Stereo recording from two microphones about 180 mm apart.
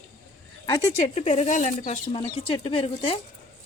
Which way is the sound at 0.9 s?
35° left (ahead or behind).